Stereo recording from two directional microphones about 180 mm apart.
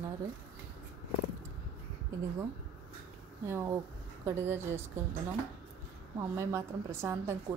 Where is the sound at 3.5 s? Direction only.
15° right (ahead or behind).